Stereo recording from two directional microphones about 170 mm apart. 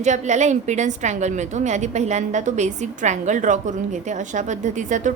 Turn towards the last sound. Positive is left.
turn(degrees=-45)  # may be behind; listen again after turning